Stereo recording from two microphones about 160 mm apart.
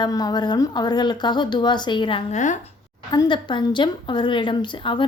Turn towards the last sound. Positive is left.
turn(degrees=30)  # may be behind; listen again after turning